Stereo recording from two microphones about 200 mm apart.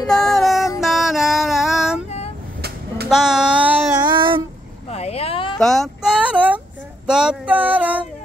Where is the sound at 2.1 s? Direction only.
35° left (ahead or behind).